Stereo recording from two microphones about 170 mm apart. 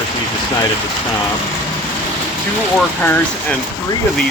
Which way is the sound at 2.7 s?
10° left (ahead or behind).